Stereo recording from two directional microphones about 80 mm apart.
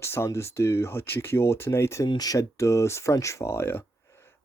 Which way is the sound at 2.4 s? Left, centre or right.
Left.